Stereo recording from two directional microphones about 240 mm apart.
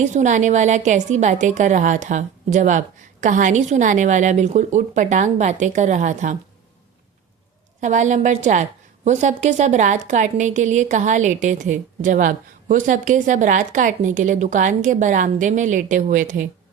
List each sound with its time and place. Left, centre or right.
0.0 s a woman's voice: right
7.8 s a woman's voice: right